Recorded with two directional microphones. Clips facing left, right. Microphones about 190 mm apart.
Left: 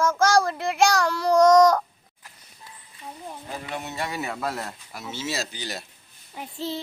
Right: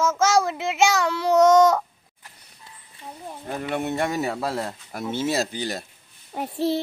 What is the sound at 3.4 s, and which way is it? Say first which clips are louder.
Speech: right 8 dB; 55° right (ahead or behind).